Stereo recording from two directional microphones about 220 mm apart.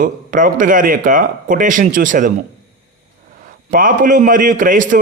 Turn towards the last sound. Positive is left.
turn(degrees=-35)  # may be behind; listen again after turning